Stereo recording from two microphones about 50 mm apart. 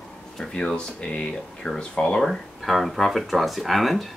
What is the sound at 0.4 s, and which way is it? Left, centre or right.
Speech, centre.